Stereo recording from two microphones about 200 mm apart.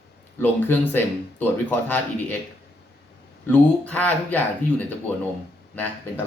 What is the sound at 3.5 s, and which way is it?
Speech, 5° left (ahead or behind).